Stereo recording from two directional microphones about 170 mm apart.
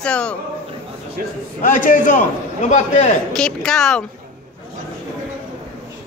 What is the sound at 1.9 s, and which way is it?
A man's voice, 50° left (ahead or behind).